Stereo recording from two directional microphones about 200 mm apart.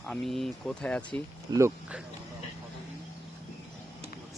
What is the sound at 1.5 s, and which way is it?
Speech, 15° right (ahead or behind).